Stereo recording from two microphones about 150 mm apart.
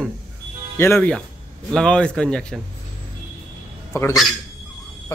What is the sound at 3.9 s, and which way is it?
Speech, 15° left (ahead or behind).